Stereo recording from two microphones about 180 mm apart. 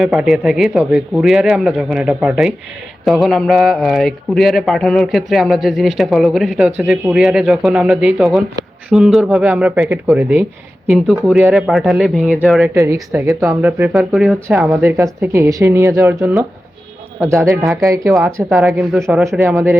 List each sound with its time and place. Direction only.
0.0 s a man's voice: centre (ahead or behind)
12.7 s speech: 15° right (ahead or behind)